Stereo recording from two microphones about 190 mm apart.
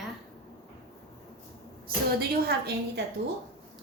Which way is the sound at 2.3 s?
55° right (ahead or behind).